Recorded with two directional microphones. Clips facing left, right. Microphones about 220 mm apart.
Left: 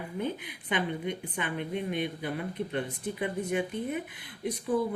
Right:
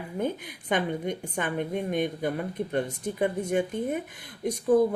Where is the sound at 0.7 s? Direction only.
45° right (ahead or behind).